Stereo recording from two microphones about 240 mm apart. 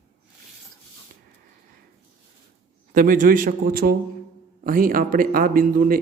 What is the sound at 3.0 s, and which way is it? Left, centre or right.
Speech, right.